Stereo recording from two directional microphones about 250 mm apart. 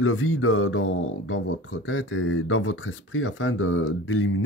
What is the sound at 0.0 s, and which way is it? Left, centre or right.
Speech, left.